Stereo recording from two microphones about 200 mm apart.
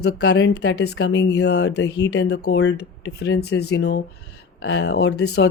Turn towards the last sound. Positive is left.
turn(degrees=75)  # may be behind; listen again after turning